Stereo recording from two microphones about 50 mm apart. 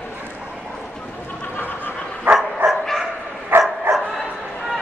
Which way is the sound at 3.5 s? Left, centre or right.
Right.